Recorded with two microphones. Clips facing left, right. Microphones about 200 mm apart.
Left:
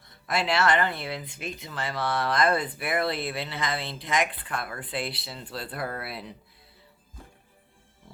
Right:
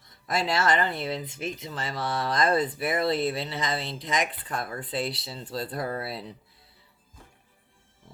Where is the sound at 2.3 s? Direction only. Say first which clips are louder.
Right 1 dB; 40° right (ahead or behind).